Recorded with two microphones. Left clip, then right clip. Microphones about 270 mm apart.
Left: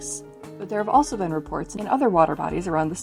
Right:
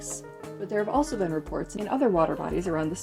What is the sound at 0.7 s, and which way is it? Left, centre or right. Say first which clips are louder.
Speech: left 6 dB; left.